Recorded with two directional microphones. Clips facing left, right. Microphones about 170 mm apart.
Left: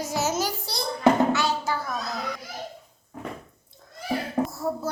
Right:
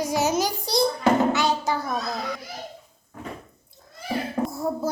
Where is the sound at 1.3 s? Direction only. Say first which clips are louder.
Right 2 dB; 15° right (ahead or behind).